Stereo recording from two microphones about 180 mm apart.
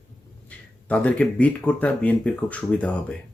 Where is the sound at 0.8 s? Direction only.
5° left (ahead or behind).